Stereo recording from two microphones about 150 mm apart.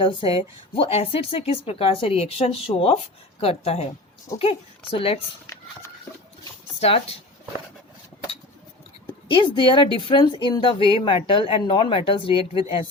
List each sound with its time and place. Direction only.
0.0 s a woman's voice: 35° left (ahead or behind)
6.7 s speech: 40° left (ahead or behind)
9.3 s a woman's voice: 30° left (ahead or behind)